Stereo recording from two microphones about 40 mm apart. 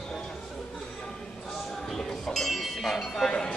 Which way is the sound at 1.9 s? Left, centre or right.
Centre.